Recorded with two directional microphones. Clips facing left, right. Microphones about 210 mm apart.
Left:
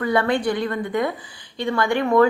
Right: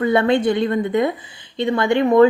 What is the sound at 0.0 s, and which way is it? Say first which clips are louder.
A woman's voice: right 4 dB; 25° right (ahead or behind).